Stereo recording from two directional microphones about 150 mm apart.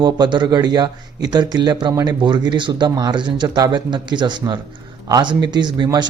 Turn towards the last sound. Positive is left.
turn(degrees=-30)  # may be behind; listen again after turning